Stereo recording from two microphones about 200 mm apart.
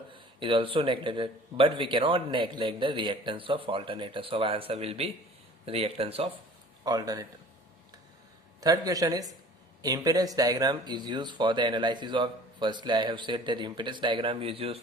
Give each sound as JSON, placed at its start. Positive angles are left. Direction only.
{"t": 0.1, "sound": "speech", "side_deg": -25}
{"t": 6.8, "sound": "speech", "side_deg": -20}
{"t": 8.6, "sound": "speech", "side_deg": -15}